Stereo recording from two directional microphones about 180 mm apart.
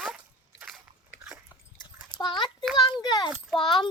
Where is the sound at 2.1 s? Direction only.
25° left (ahead or behind).